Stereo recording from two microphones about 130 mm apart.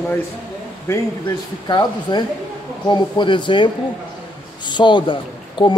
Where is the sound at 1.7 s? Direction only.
35° left (ahead or behind).